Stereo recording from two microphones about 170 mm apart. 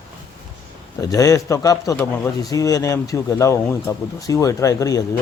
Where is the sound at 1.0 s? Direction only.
20° left (ahead or behind).